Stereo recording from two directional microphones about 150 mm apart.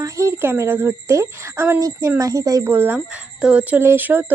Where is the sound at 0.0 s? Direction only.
20° right (ahead or behind).